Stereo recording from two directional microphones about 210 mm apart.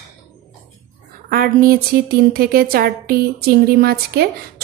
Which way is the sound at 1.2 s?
45° right (ahead or behind).